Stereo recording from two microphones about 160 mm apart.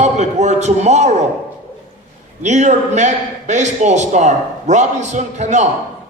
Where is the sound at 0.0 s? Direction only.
45° right (ahead or behind).